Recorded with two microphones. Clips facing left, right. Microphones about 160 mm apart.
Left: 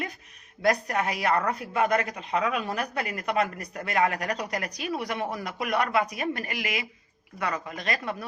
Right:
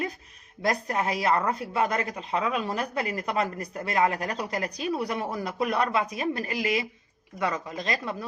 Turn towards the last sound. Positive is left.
turn(degrees=-25)  # may be behind; listen again after turning